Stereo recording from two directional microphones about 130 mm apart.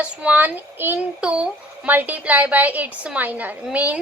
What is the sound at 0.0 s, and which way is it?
Speech, 10° right (ahead or behind).